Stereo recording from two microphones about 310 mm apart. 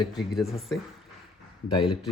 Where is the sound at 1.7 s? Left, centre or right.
Centre.